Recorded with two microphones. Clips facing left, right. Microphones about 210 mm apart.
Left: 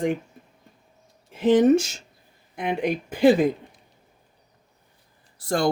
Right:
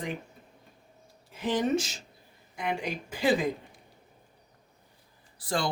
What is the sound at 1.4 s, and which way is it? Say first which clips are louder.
Speech: left 11 dB; 50° left (ahead or behind).